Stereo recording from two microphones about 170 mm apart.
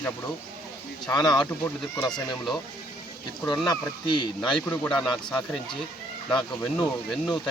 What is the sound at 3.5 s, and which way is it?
Speech, 25° left (ahead or behind).